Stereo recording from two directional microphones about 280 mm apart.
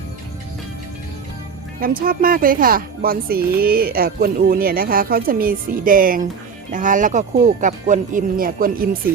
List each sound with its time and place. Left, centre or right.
1.8 s speech: right